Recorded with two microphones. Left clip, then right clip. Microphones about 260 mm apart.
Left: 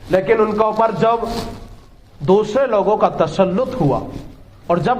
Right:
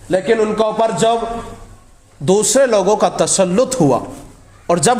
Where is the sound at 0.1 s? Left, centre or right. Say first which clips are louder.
Even; right.